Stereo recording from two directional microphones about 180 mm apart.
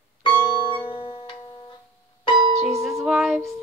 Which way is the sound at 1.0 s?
25° left (ahead or behind).